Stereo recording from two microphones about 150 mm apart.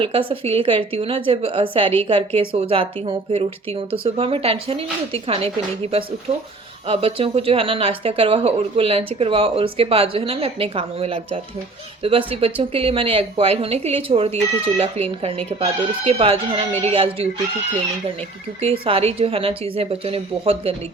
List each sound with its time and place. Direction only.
0.0 s speech: 35° right (ahead or behind)
18.9 s speech: 40° right (ahead or behind)